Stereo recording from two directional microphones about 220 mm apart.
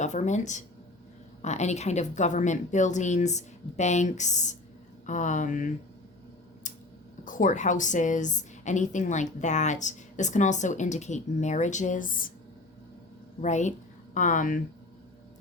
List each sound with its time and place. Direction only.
0.0 s a woman's voice: 30° left (ahead or behind)
7.3 s a woman's voice: 35° left (ahead or behind)
13.4 s speech: 35° left (ahead or behind)